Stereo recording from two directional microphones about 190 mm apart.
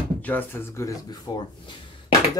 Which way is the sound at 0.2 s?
10° left (ahead or behind).